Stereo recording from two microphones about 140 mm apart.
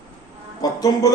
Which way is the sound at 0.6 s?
25° left (ahead or behind).